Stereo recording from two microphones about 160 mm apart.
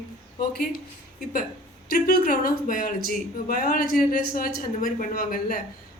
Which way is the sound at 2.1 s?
65° left (ahead or behind).